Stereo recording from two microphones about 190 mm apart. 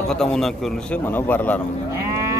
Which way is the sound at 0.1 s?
5° left (ahead or behind).